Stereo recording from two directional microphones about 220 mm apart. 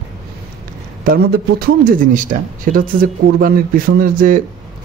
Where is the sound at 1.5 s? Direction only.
35° right (ahead or behind).